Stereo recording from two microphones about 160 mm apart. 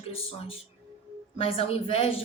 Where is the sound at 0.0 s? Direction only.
35° left (ahead or behind).